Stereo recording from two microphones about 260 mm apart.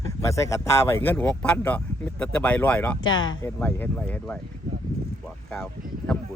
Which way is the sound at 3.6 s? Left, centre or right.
Centre.